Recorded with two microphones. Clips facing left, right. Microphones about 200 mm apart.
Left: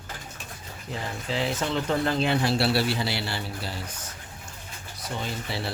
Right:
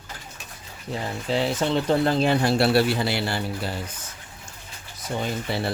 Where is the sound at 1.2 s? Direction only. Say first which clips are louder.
Right 5 dB; 35° right (ahead or behind); by 3.7 s 50° right (ahead or behind).